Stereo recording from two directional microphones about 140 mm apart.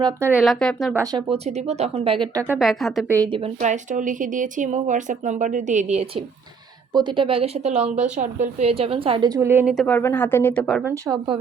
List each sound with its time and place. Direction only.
0.2 s speech: 15° right (ahead or behind)
0.4 s speech: 5° left (ahead or behind)
1.1 s a woman's voice: 45° right (ahead or behind)
2.6 s speech: centre (ahead or behind)
3.6 s speech: 65° right (ahead or behind)
6.9 s a woman's voice: 35° right (ahead or behind); by 8.0 s 50° right (ahead or behind)
8.1 s a woman's voice: 60° right (ahead or behind); by 9.4 s 35° right (ahead or behind)
9.4 s speech: 15° right (ahead or behind)
9.7 s speech: 10° left (ahead or behind)
10.9 s speech: 25° right (ahead or behind)